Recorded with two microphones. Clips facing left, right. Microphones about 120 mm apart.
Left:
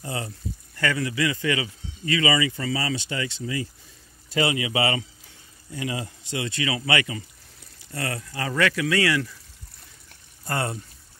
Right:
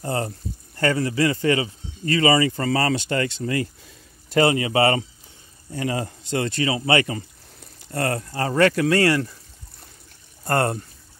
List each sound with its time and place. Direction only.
0.0 s speech: 45° right (ahead or behind)
0.7 s speech: 35° right (ahead or behind); by 3.6 s 55° right (ahead or behind)
4.3 s speech: 45° right (ahead or behind)
10.4 s speech: 50° right (ahead or behind)